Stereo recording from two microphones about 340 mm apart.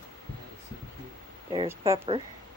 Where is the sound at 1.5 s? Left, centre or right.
Centre.